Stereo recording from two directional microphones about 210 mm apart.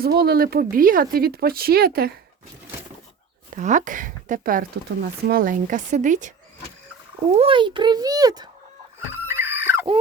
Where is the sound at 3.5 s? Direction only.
35° right (ahead or behind); by 8.5 s 15° right (ahead or behind).